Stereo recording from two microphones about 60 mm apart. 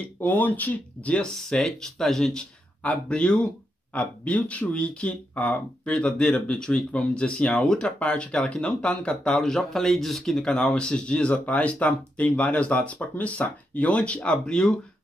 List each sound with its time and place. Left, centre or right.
0.2 s speech: left
1.2 s speech: centre
2.8 s speech: left